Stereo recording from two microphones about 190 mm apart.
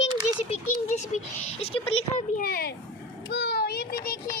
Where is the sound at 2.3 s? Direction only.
55° left (ahead or behind).